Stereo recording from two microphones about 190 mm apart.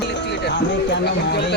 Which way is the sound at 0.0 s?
65° left (ahead or behind).